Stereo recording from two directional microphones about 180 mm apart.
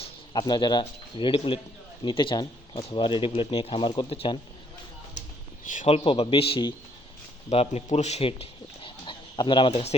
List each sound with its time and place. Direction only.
0.0 s speech: 25° left (ahead or behind)
5.8 s speech: 30° left (ahead or behind)